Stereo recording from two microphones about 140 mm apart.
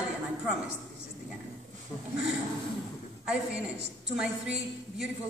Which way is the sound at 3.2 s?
5° right (ahead or behind).